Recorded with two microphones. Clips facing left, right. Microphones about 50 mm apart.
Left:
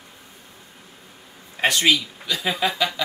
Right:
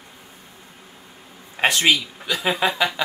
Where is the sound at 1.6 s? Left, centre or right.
Right.